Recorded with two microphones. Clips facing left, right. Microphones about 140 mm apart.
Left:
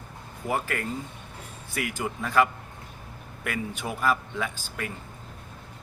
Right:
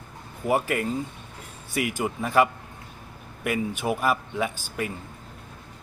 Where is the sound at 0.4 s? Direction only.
15° right (ahead or behind).